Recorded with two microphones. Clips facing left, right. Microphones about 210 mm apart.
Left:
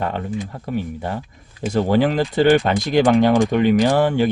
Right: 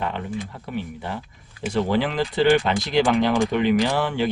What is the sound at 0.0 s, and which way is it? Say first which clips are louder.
Speech: left 4 dB; 45° left (ahead or behind).